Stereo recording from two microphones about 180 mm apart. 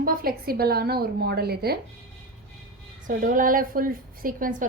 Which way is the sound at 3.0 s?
50° right (ahead or behind).